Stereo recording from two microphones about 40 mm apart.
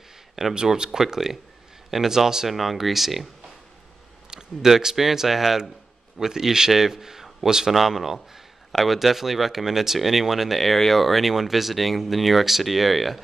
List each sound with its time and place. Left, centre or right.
0.6 s speech: centre
2.5 s speech: centre
4.3 s speech: centre